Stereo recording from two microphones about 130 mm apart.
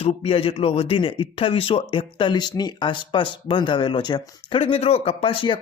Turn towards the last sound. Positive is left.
turn(degrees=40)  # may be behind; listen again after turning